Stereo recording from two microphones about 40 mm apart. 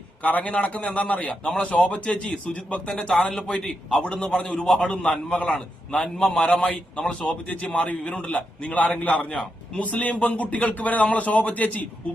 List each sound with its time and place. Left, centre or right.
0.2 s a man's voice: left
1.5 s a man's voice: left
1.7 s a man's voice: left
2.0 s a man's voice: centre
2.5 s a man's voice: left
3.1 s a man's voice: centre
4.0 s a man's voice: left
4.4 s a man's voice: centre
5.3 s a man's voice: left
7.1 s a man's voice: left